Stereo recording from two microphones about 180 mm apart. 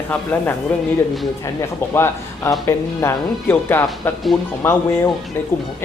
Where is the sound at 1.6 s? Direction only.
15° left (ahead or behind).